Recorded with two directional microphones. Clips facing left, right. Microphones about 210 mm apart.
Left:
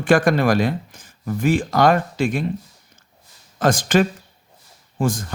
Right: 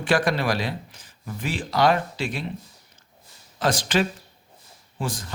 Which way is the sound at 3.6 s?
50° left (ahead or behind).